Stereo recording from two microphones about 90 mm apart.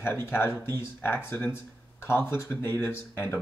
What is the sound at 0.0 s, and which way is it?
Speech, 25° left (ahead or behind).